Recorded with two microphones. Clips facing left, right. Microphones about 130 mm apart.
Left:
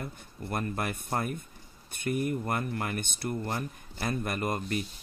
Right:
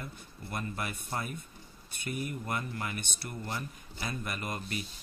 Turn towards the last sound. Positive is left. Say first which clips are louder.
# left 6 dB
turn(degrees=45)  # may be behind; listen again after turning